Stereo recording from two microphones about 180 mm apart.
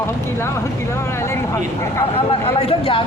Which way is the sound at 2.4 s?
30° left (ahead or behind).